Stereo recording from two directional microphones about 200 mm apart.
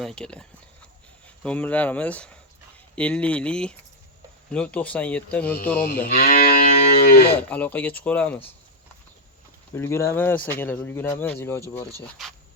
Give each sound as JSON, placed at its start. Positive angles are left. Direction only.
{"t": 0.0, "sound": "speech", "side_deg": 5}
{"t": 1.5, "sound": "speech", "side_deg": 5}
{"t": 5.8, "sound": "speech", "side_deg": 50}
{"t": 7.5, "sound": "speech", "side_deg": 10}
{"t": 9.7, "sound": "speech", "side_deg": 10}